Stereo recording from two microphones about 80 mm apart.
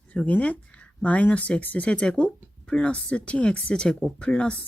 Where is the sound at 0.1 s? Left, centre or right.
Centre.